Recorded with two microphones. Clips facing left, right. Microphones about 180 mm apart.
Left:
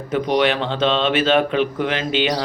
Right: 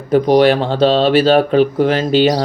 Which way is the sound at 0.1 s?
35° right (ahead or behind).